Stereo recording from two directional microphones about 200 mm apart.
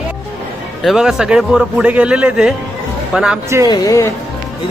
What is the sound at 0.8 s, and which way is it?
A man's voice, centre (ahead or behind).